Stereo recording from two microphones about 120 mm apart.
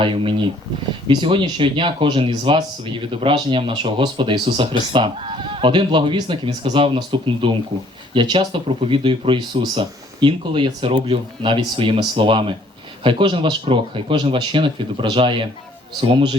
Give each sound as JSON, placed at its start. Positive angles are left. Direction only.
{"t": 0.0, "sound": "speech", "side_deg": -45}